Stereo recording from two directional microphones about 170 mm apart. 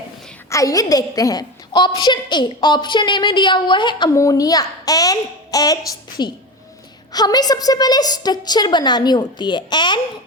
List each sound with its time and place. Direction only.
0.5 s a woman's voice: 20° left (ahead or behind)